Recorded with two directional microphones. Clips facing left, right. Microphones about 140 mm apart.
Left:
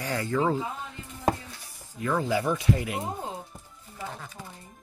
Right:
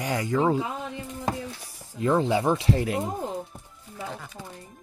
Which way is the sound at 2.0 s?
25° right (ahead or behind).